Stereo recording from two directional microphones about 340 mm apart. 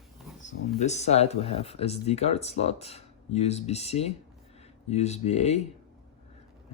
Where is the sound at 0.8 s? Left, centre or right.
Centre.